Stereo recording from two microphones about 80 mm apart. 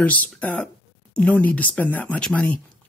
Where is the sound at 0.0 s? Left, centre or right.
Centre.